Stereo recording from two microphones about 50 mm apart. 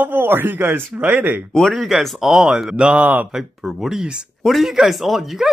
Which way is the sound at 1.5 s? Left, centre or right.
Centre.